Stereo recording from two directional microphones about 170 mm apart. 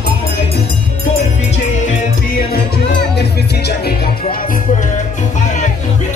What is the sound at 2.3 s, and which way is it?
Music, 65° left (ahead or behind).